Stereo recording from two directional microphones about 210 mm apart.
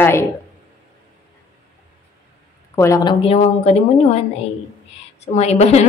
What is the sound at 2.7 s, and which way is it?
Speech, 15° left (ahead or behind).